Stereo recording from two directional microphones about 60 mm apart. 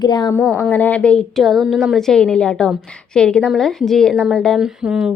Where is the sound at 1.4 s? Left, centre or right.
Centre.